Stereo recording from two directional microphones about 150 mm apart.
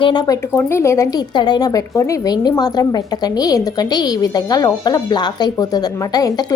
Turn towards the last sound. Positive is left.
turn(degrees=25)  # may be behind; listen again after turning